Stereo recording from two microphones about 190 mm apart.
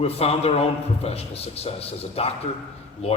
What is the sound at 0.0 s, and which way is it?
A man's voice, 30° left (ahead or behind).